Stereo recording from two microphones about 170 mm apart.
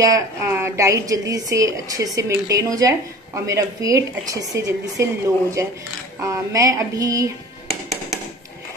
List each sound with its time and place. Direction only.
0.0 s a woman's voice: 15° right (ahead or behind)